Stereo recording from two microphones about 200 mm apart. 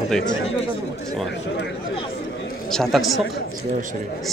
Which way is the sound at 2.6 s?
5° left (ahead or behind).